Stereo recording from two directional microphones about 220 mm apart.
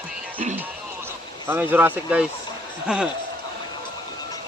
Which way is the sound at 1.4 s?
10° right (ahead or behind).